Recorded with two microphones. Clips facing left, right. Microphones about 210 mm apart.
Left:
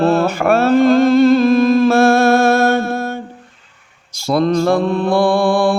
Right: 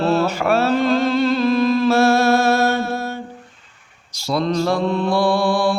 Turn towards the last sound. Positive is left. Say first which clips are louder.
# left 4 dB
turn(degrees=50)  # may be behind; listen again after turning